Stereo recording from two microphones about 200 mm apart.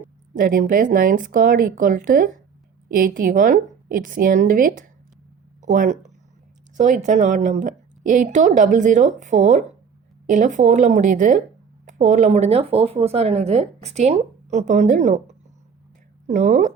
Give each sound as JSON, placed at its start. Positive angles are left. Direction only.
{"t": 0.3, "sound": "a woman's voice", "side_deg": -45}